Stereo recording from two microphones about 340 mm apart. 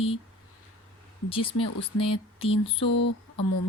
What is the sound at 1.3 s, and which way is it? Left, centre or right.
Speech, centre.